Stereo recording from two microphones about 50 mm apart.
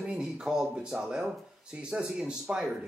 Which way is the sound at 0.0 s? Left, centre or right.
Centre.